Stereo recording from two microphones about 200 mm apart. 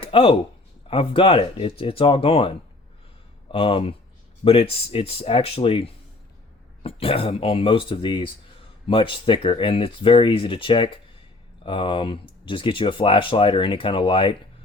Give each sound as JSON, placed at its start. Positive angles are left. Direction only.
{"t": 0.0, "sound": "speech", "side_deg": 25}